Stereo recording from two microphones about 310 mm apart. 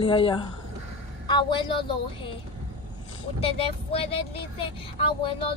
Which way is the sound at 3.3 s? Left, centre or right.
Centre.